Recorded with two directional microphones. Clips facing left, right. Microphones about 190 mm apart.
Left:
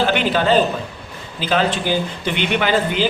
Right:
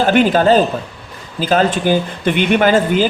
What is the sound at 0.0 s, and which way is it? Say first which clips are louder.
Speech: right 6 dB; 45° right (ahead or behind).